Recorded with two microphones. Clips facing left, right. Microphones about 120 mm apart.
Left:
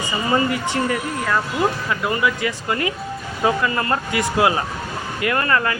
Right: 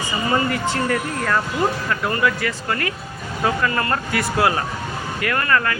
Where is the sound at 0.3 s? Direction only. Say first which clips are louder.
Left 1 dB; 15° left (ahead or behind).